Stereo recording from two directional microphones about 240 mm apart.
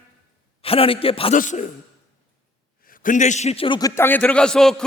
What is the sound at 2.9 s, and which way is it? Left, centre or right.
A man's voice, left.